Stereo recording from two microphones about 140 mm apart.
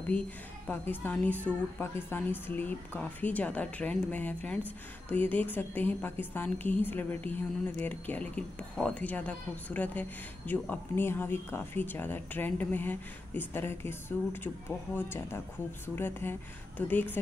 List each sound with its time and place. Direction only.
0.7 s speech: 15° left (ahead or behind)